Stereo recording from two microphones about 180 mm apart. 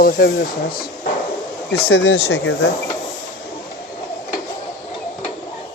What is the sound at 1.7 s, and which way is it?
Speech, 70° left (ahead or behind).